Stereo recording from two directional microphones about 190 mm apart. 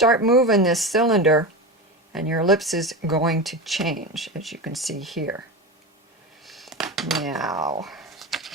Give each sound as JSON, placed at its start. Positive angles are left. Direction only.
{"t": 0.0, "sound": "speech", "side_deg": 0}
{"t": 6.4, "sound": "dishes", "side_deg": 0}
{"t": 7.5, "sound": "speech", "side_deg": -20}
{"t": 7.8, "sound": "computer keyboard", "side_deg": 0}